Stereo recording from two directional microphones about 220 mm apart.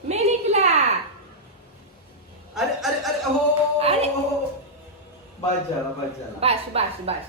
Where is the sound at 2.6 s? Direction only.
Centre (ahead or behind).